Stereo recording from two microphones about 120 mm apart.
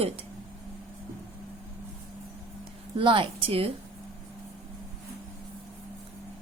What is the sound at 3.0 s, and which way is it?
Speech, 45° right (ahead or behind).